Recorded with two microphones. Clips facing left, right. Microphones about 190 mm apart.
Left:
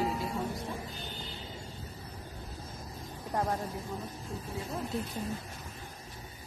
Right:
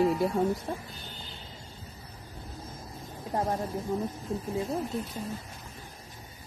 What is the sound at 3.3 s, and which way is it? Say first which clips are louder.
Speech: right 2 dB; 25° right (ahead or behind).